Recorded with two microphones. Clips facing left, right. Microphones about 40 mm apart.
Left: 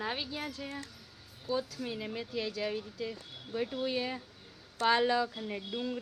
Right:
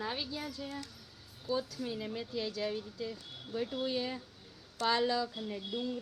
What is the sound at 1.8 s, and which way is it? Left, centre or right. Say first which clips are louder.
A woman's voice: left 1 dB; left.